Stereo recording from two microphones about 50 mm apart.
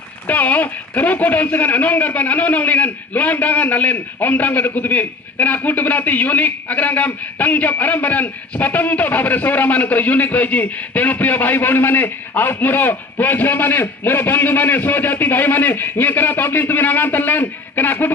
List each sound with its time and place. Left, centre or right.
0.3 s speech: left